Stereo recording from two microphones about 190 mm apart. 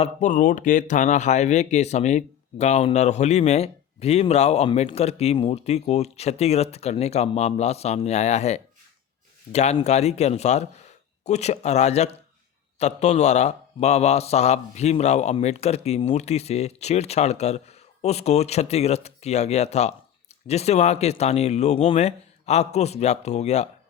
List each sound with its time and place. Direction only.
0.0 s speech: 40° left (ahead or behind)